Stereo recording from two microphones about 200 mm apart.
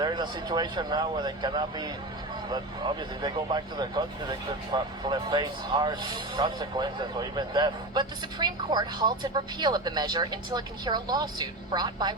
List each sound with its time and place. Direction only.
0.0 s speech: 20° right (ahead or behind)